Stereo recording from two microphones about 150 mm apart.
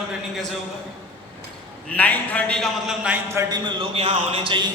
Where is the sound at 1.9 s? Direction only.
10° left (ahead or behind).